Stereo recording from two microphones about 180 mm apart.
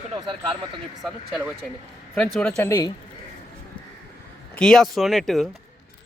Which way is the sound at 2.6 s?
15° left (ahead or behind).